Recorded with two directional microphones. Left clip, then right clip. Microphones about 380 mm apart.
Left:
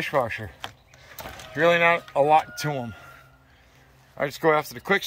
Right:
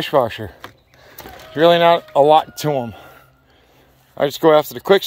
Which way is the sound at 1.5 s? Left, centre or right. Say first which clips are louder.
Right 7 dB; centre.